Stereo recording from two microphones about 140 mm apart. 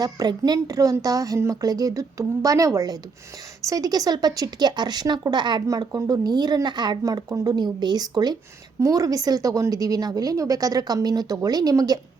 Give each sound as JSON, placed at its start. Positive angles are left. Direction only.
{"t": 0.0, "sound": "speech", "side_deg": -30}